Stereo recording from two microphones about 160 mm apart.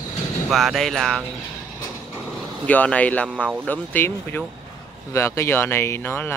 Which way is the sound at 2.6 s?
10° left (ahead or behind).